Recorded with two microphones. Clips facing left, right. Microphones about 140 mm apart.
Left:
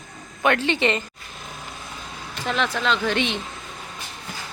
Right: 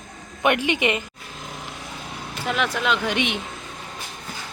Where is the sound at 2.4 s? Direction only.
5° right (ahead or behind).